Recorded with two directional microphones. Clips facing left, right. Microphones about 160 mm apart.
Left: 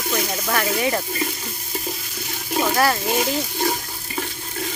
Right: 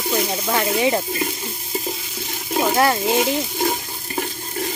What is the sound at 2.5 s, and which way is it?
Speech, 20° right (ahead or behind).